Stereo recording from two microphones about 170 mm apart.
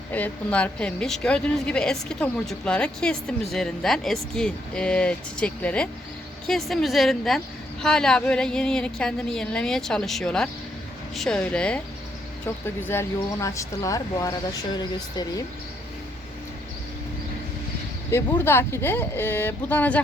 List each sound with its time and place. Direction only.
0.1 s a woman's voice: 10° left (ahead or behind); by 15.2 s 25° left (ahead or behind)
18.1 s speech: 15° left (ahead or behind)